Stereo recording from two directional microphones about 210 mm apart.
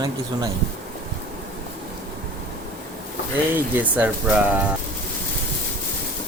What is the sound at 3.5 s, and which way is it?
Speech, 10° right (ahead or behind).